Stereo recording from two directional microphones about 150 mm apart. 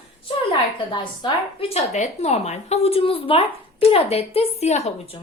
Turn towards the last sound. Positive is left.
turn(degrees=45)  # may be behind; listen again after turning